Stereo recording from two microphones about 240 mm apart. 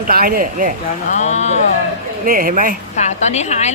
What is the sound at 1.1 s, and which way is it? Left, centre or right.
Speech, left.